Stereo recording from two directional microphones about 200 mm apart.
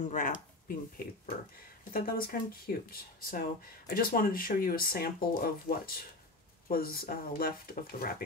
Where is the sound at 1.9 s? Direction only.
45° left (ahead or behind).